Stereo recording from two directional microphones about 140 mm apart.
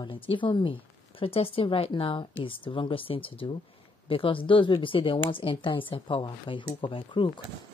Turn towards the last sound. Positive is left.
turn(degrees=40)  # may be behind; listen again after turning